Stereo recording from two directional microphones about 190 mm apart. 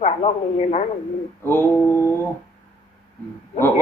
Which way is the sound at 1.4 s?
10° left (ahead or behind).